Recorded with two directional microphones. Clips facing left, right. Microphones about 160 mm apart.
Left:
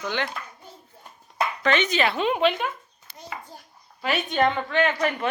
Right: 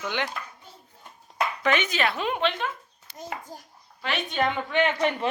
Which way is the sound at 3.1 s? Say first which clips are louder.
Right 2 dB; 45° right (ahead or behind).